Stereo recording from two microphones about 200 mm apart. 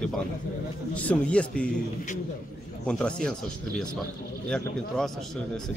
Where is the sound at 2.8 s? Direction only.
5° left (ahead or behind).